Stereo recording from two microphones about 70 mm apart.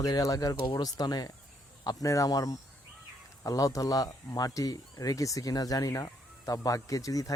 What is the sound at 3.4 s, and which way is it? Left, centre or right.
Speech, left.